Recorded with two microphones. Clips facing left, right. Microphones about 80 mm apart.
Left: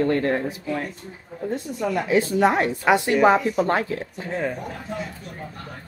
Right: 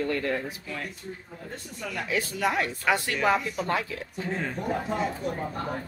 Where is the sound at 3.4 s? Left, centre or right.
Left.